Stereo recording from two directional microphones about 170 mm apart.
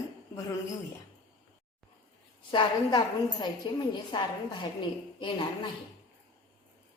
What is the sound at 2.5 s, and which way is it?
A woman's voice, 25° left (ahead or behind).